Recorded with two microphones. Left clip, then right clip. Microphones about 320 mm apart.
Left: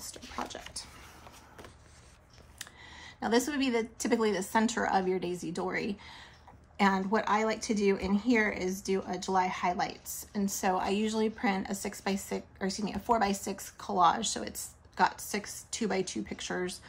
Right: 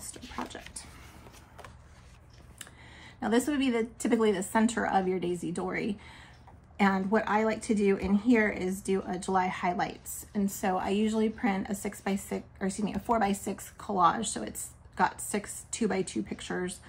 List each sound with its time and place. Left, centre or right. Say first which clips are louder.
0.1 s dog: even; centre
2.8 s a woman's voice: even; centre